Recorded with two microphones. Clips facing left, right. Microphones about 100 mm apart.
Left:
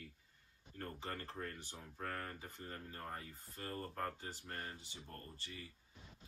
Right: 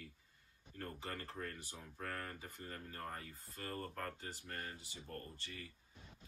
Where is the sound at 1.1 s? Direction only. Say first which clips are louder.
Left 1 dB; 25° left (ahead or behind).